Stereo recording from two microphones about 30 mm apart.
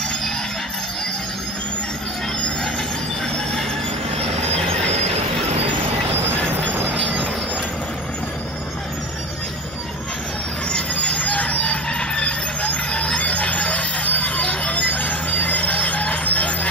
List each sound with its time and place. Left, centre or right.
11.0 s train: left
11.6 s vehicle: left
14.4 s a sound: left
14.8 s train: left